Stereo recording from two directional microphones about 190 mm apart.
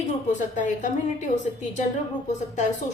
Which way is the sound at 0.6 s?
40° left (ahead or behind).